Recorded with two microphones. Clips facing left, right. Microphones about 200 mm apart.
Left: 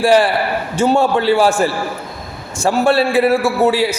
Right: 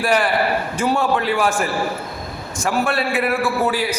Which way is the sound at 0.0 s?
30° left (ahead or behind).